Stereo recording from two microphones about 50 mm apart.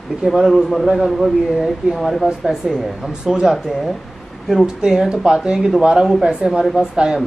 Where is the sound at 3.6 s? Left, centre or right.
Centre.